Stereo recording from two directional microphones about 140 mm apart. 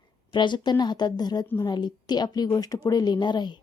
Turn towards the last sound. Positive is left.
turn(degrees=30)  # may be behind; listen again after turning